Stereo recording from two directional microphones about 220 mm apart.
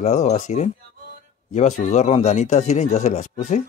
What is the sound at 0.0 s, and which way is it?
Speech, 30° left (ahead or behind).